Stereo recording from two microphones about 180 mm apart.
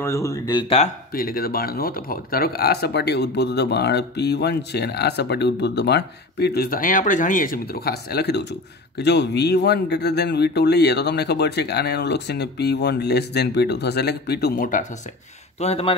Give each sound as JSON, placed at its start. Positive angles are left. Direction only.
{"t": 0.0, "sound": "speech", "side_deg": 15}
{"t": 1.1, "sound": "speech", "side_deg": 55}
{"t": 15.6, "sound": "speech", "side_deg": 35}